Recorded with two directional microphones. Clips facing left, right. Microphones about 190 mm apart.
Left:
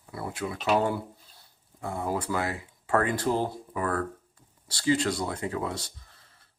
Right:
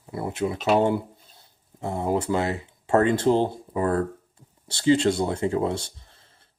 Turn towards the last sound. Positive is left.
turn(degrees=-25)  # may be behind; listen again after turning